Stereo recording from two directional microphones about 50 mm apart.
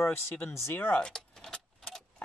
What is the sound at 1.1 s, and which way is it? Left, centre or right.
Vehicle, centre.